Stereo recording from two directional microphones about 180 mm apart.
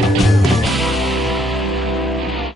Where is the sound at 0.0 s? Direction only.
Centre (ahead or behind).